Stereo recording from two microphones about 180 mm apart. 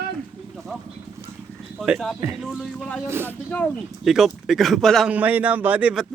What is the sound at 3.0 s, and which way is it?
Speech, 15° right (ahead or behind).